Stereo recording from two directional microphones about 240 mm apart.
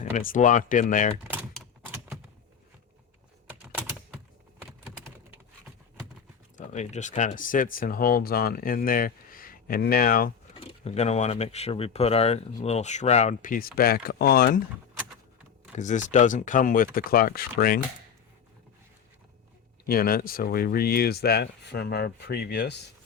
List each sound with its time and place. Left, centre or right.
0.0 s speech: left
1.3 s typewriter: centre
6.6 s speech: left
10.5 s speech: left
15.8 s speech: left
19.9 s speech: left